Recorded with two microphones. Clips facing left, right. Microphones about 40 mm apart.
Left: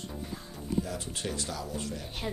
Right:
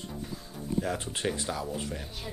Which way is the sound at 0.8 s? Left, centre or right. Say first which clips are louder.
Right 5 dB; right.